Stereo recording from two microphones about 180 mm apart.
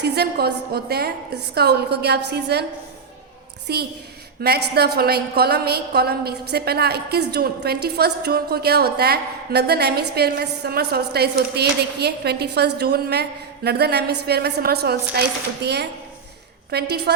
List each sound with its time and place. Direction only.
0.0 s a woman's voice: 65° right (ahead or behind)
3.7 s a woman's voice: 65° right (ahead or behind)